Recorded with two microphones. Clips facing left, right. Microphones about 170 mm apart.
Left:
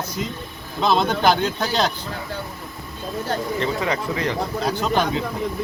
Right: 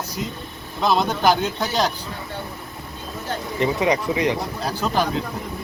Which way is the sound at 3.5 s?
15° right (ahead or behind).